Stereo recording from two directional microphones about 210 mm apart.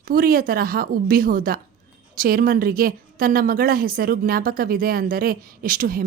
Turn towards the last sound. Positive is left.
turn(degrees=-40)  # may be behind; listen again after turning